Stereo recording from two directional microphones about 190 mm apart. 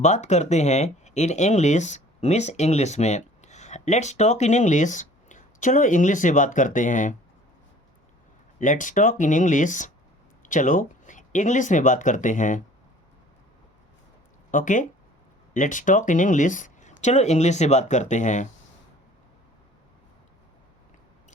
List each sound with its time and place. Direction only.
0.0 s speech: 35° left (ahead or behind)
8.5 s speech: 40° left (ahead or behind)
14.5 s speech: 40° left (ahead or behind)